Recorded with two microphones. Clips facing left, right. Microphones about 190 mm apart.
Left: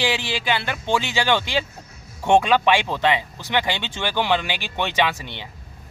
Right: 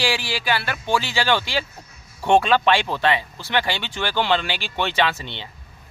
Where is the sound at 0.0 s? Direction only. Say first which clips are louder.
Even; 20° left (ahead or behind).